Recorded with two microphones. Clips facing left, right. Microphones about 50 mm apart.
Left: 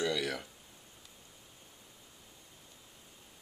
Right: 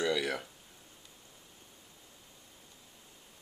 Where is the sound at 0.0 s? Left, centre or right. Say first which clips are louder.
Right 2 dB; centre.